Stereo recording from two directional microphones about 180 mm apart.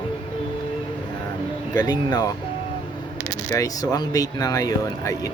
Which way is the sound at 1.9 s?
20° left (ahead or behind).